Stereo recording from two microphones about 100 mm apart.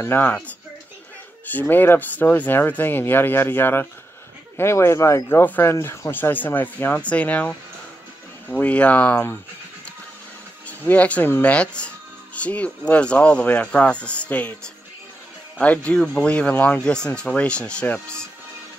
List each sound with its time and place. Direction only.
0.0 s speech: 25° left (ahead or behind)
10.8 s speech: 15° left (ahead or behind)
15.6 s speech: 15° left (ahead or behind)